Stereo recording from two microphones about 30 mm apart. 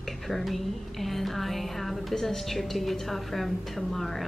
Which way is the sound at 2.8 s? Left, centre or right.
Centre.